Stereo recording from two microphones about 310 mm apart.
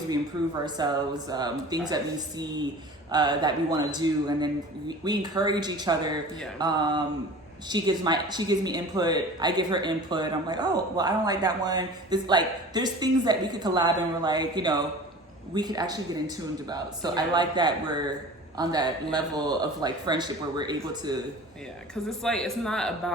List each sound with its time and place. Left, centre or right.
0.8 s speech: centre
22.2 s a man's voice: centre